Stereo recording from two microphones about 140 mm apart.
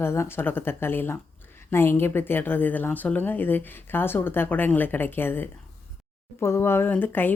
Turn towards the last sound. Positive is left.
turn(degrees=15)  # may be behind; listen again after turning